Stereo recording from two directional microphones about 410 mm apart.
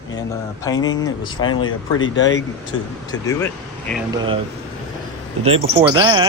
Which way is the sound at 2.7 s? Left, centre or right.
Centre.